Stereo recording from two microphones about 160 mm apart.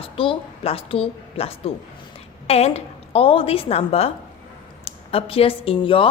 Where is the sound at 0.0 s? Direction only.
35° left (ahead or behind).